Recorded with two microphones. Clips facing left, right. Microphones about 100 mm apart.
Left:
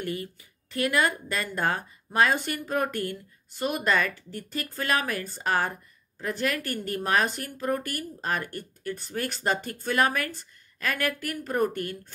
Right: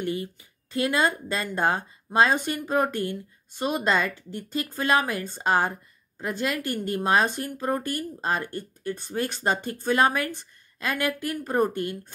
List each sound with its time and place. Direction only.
0.0 s speech: 25° right (ahead or behind)